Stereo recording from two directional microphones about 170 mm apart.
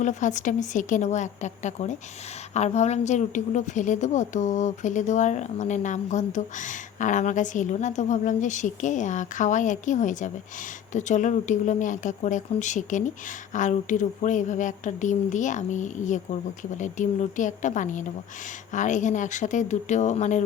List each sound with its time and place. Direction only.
0.0 s a woman's voice: 45° left (ahead or behind)